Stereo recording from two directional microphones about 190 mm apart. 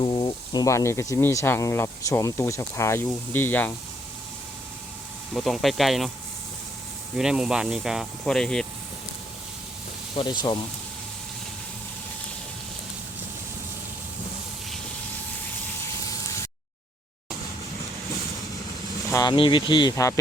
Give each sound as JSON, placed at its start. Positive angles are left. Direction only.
{"t": 0.0, "sound": "speech", "side_deg": 20}
{"t": 5.3, "sound": "speech", "side_deg": 0}
{"t": 7.2, "sound": "speech", "side_deg": -5}
{"t": 10.2, "sound": "speech", "side_deg": 25}
{"t": 19.1, "sound": "speech", "side_deg": 20}